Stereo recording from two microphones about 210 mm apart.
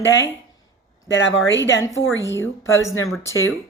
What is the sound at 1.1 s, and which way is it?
Speech, 60° left (ahead or behind).